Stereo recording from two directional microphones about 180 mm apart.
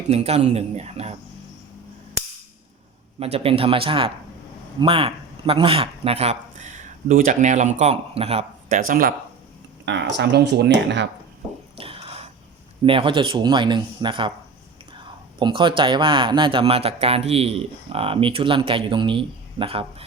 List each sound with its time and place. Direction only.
0.1 s speech: 35° right (ahead or behind)
3.2 s speech: 35° right (ahead or behind)
8.7 s speech: 50° right (ahead or behind)
9.8 s speech: 75° right (ahead or behind)
11.8 s a sound: 30° right (ahead or behind)
12.8 s speech: 30° right (ahead or behind)
15.4 s speech: 25° right (ahead or behind)